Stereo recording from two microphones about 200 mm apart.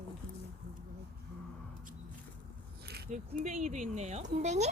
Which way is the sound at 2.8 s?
55° right (ahead or behind).